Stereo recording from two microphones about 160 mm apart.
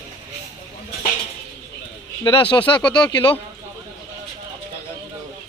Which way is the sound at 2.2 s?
30° left (ahead or behind).